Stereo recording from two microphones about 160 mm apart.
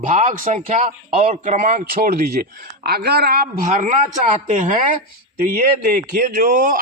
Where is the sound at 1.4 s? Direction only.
55° right (ahead or behind); by 3.6 s 70° right (ahead or behind).